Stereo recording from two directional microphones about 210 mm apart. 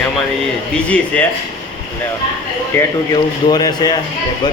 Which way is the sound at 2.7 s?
10° left (ahead or behind).